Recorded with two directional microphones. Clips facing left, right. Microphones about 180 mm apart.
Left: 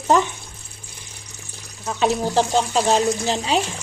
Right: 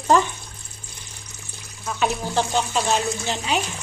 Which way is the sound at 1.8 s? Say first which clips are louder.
Left 4 dB; 30° left (ahead or behind).